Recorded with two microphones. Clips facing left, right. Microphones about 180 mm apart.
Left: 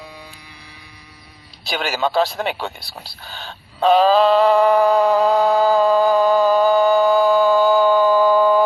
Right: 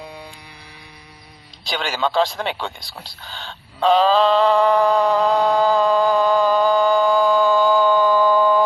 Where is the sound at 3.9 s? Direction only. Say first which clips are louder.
Left 2 dB; 15° left (ahead or behind).